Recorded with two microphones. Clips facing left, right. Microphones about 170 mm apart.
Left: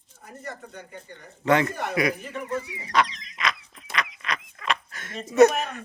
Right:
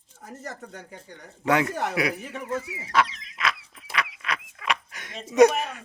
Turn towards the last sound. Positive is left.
turn(degrees=-10)  # may be behind; listen again after turning